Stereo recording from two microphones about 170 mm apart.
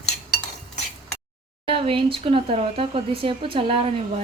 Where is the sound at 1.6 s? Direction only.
30° right (ahead or behind).